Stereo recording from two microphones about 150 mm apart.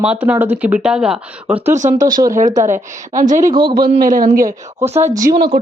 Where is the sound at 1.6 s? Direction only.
50° right (ahead or behind).